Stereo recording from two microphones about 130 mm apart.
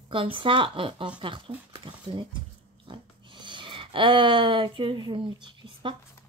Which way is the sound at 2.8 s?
40° right (ahead or behind).